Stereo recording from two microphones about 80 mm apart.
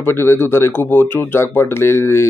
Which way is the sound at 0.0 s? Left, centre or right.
Left.